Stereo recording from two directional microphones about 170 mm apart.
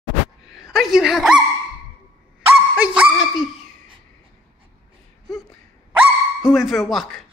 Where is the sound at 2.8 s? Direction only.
5° right (ahead or behind).